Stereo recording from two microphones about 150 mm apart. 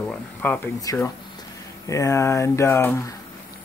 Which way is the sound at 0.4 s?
10° left (ahead or behind).